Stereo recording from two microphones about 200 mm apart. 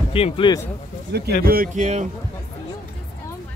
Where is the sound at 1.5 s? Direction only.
40° right (ahead or behind).